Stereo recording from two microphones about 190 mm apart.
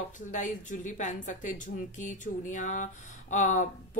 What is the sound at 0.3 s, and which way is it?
A woman's voice, 40° left (ahead or behind).